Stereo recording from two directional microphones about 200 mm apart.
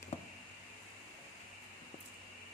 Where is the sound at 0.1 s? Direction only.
35° left (ahead or behind).